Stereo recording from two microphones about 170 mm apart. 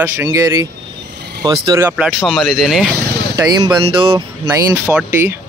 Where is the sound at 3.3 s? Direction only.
20° right (ahead or behind).